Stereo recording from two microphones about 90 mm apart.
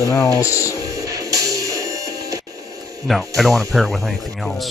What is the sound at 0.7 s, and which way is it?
Music, 40° right (ahead or behind).